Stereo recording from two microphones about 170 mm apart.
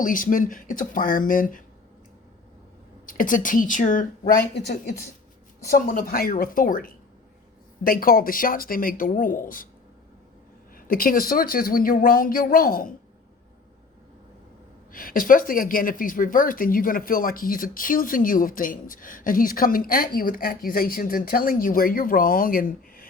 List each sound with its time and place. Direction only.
0.0 s speech: 50° left (ahead or behind)
3.1 s a woman's voice: 50° left (ahead or behind)
10.8 s a woman's voice: 55° left (ahead or behind)
14.9 s a woman's voice: 55° left (ahead or behind)